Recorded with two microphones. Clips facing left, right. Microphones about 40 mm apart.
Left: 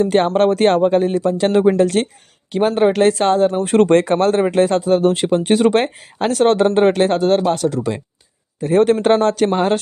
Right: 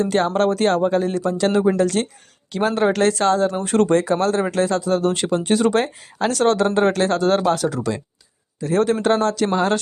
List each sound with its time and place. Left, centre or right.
0.0 s speech: left
2.5 s speech: left
3.8 s speech: left; by 7.3 s centre
7.3 s speech: centre
7.8 s speech: left
8.6 s speech: left
9.5 s speech: left